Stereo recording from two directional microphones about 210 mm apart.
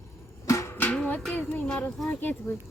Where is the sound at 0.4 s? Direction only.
15° left (ahead or behind).